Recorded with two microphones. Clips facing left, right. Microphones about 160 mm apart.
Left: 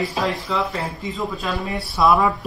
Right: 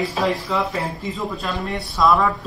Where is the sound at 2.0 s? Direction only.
20° left (ahead or behind).